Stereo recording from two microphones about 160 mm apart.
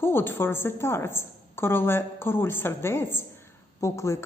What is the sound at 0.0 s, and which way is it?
Speech, 15° left (ahead or behind).